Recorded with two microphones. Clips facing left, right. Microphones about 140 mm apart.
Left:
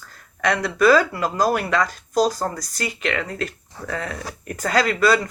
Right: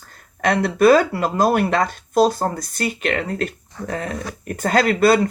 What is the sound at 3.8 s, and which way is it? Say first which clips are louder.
Speech: right 3 dB; 25° right (ahead or behind).